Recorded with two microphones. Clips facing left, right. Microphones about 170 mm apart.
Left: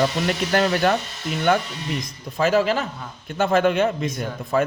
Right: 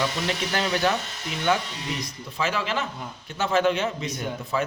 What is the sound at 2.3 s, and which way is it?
Speech, 45° left (ahead or behind).